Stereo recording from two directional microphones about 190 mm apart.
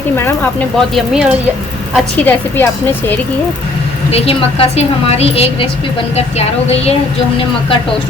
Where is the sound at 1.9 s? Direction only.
10° left (ahead or behind).